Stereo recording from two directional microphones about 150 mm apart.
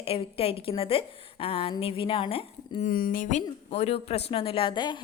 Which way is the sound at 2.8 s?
65° left (ahead or behind).